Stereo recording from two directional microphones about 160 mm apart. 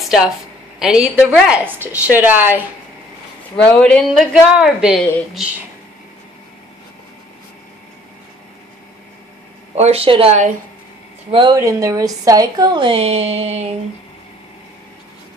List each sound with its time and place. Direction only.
0.0 s a sound: 5° right (ahead or behind)
0.7 s a woman's voice: 5° right (ahead or behind)
3.5 s speech: 10° left (ahead or behind)
4.1 s a woman's voice: 5° right (ahead or behind)
9.8 s a woman's voice: 40° right (ahead or behind)
11.5 s a woman's voice: 20° right (ahead or behind); by 13.7 s 40° right (ahead or behind)